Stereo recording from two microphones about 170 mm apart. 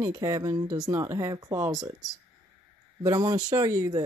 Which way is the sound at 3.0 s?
20° right (ahead or behind).